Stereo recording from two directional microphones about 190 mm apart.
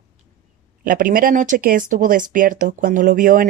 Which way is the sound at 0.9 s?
45° right (ahead or behind).